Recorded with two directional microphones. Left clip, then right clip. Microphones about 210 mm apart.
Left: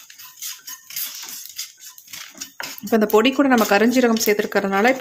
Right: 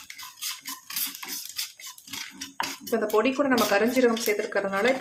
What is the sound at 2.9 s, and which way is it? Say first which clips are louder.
Speech: left 8 dB; 50° left (ahead or behind).